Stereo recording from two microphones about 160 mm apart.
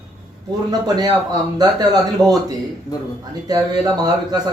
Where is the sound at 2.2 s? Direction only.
Centre (ahead or behind).